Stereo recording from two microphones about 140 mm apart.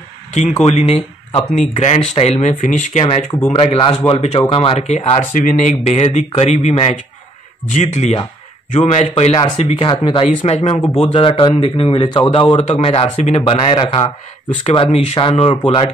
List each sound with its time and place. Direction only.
0.3 s speech: 55° left (ahead or behind)
3.5 s speech: 40° left (ahead or behind)
4.1 s speech: 50° left (ahead or behind)
4.5 s speech: 40° left (ahead or behind); by 6.7 s 60° left (ahead or behind)
7.7 s speech: 55° left (ahead or behind); by 10.3 s 35° left (ahead or behind)
10.4 s speech: 50° left (ahead or behind)
12.5 s speech: 55° left (ahead or behind)
13.4 s speech: 40° left (ahead or behind)